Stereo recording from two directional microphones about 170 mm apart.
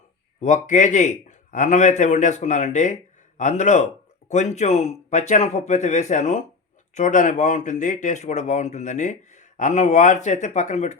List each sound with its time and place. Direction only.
0.4 s speech: 45° left (ahead or behind)